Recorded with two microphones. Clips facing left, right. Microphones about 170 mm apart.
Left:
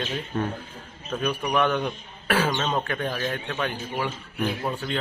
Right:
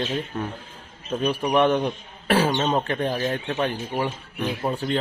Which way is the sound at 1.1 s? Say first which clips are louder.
Right 3 dB; 25° right (ahead or behind).